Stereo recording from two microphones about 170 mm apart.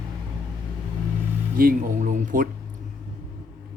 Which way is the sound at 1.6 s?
55° right (ahead or behind).